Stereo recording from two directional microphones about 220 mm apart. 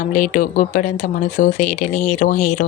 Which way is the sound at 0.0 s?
35° left (ahead or behind).